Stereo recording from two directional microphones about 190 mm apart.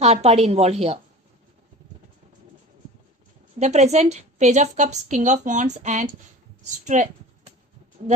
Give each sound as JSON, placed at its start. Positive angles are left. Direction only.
{"t": 0.0, "sound": "a woman's voice", "side_deg": -35}
{"t": 3.6, "sound": "a woman's voice", "side_deg": -35}